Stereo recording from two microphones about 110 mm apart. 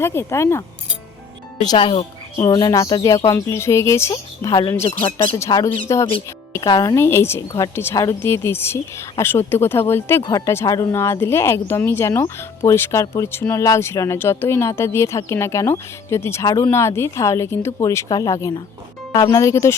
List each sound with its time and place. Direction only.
0.0 s speech: 25° left (ahead or behind)
1.8 s a woman's voice: 55° left (ahead or behind)
2.4 s speech: 40° left (ahead or behind)
6.9 s speech: 25° left (ahead or behind)